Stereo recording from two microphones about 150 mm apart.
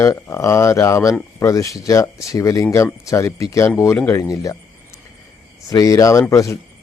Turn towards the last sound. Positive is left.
turn(degrees=20)  # may be behind; listen again after turning